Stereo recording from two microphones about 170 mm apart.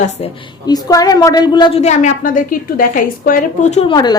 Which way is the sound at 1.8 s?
40° left (ahead or behind).